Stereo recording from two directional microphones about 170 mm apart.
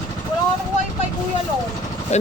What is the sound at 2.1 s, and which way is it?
Speech, 40° left (ahead or behind).